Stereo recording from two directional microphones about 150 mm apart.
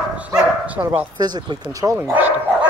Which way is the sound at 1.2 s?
30° right (ahead or behind).